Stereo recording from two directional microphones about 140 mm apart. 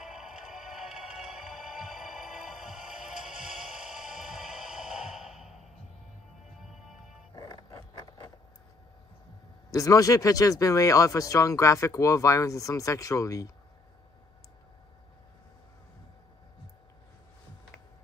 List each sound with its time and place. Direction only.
0.0 s music: 5° right (ahead or behind)
7.3 s a sound: 25° left (ahead or behind)
9.7 s speech: 25° left (ahead or behind)